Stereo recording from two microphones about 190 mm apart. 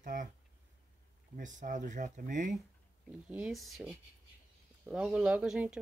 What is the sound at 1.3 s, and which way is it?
Speech, 40° right (ahead or behind).